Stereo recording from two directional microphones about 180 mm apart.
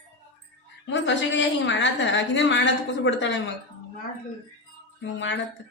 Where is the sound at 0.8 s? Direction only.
90° left.